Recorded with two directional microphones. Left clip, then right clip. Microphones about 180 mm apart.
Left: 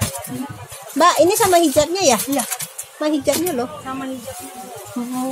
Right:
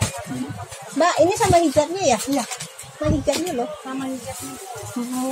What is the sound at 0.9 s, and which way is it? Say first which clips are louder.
Speech: left 4 dB; 30° left (ahead or behind).